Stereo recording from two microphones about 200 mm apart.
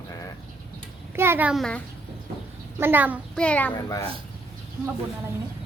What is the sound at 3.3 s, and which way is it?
Speech, 5° left (ahead or behind).